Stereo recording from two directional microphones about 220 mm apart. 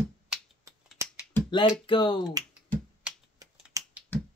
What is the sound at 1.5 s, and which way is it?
Finger snapping, 20° left (ahead or behind).